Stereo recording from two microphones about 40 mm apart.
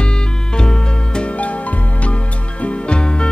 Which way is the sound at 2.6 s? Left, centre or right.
Left.